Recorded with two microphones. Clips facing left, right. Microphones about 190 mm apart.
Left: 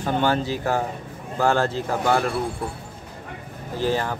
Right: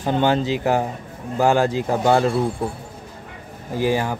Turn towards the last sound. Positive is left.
turn(degrees=-10)  # may be behind; listen again after turning